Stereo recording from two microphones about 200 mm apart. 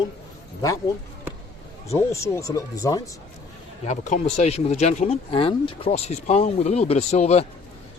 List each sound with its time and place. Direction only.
1.9 s speech: 15° left (ahead or behind)
3.8 s speech: 35° left (ahead or behind)